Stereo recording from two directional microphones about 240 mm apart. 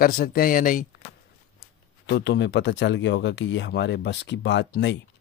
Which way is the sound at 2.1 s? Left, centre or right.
Left.